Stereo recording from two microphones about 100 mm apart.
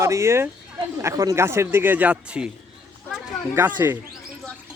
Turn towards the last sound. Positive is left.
turn(degrees=-20)  # may be behind; listen again after turning